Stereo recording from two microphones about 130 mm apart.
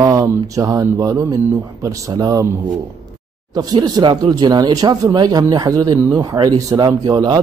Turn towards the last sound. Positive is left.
turn(degrees=-30)  # may be behind; listen again after turning